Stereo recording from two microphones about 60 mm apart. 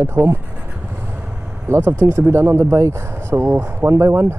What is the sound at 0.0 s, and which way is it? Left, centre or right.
Speech, right.